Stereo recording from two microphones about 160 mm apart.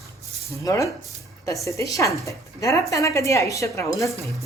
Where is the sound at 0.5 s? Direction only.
20° left (ahead or behind).